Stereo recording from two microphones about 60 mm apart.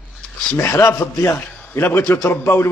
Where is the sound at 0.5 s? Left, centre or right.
Left.